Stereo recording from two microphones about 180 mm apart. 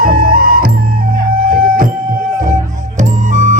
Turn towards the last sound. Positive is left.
turn(degrees=-45)  # may be behind; listen again after turning